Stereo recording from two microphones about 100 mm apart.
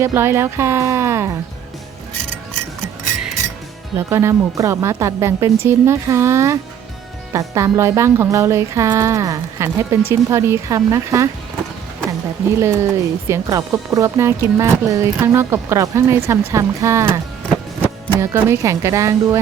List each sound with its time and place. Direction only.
0.0 s speech: 25° right (ahead or behind)
3.9 s speech: 30° right (ahead or behind)
12.5 s speech: 25° right (ahead or behind)